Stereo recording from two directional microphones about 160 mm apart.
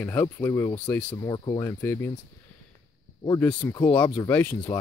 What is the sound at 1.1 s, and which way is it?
Cricket, 25° left (ahead or behind).